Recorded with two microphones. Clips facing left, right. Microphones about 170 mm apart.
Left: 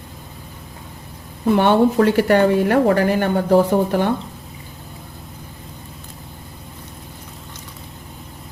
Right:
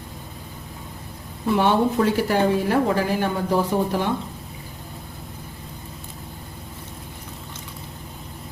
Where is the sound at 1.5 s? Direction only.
65° left (ahead or behind).